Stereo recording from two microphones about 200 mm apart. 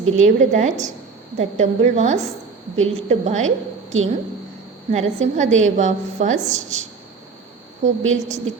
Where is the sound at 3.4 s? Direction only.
80° right.